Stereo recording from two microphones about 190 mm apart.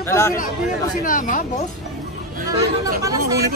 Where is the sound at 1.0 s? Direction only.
45° left (ahead or behind).